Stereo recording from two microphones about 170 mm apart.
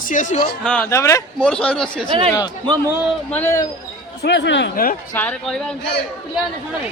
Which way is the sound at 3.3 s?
15° left (ahead or behind).